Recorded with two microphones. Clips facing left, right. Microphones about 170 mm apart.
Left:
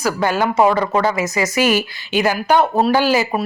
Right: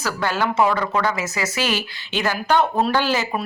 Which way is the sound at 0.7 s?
35° left (ahead or behind).